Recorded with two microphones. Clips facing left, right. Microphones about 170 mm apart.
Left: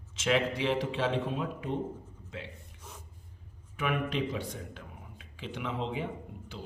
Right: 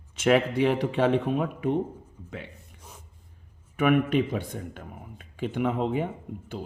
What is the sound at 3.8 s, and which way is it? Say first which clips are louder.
A man's voice: right 9 dB; 55° right (ahead or behind).